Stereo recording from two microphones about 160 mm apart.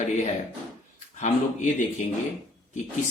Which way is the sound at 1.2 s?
50° left (ahead or behind).